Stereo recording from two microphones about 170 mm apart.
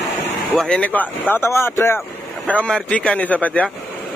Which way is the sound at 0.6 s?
5° left (ahead or behind).